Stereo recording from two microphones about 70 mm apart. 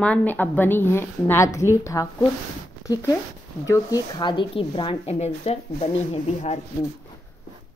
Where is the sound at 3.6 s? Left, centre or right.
Left.